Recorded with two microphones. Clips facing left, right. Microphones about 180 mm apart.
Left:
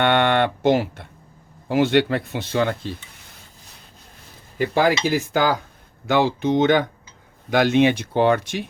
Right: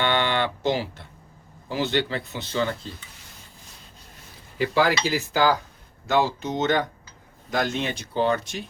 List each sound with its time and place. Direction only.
0.0 s speech: 55° left (ahead or behind)
4.5 s cutlery: 50° left (ahead or behind)
6.1 s speech: 65° left (ahead or behind)